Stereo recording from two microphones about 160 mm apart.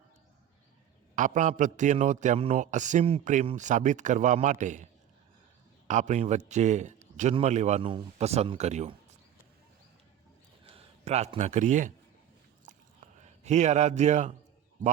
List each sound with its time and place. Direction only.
1.1 s a man's voice: 55° right (ahead or behind)
5.9 s a man's voice: 50° right (ahead or behind)
10.7 s speech: 40° right (ahead or behind)
13.1 s a man's voice: 45° right (ahead or behind)